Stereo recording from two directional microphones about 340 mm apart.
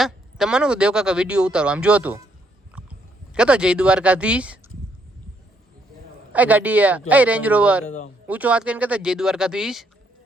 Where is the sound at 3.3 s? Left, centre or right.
Centre.